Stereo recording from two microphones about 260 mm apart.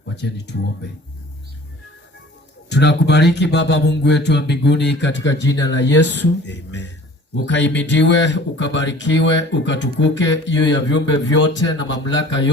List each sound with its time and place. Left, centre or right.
0.2 s speech: left
2.6 s speech: left